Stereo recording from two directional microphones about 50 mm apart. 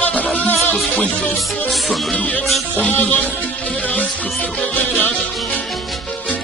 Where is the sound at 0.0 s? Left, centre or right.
Left.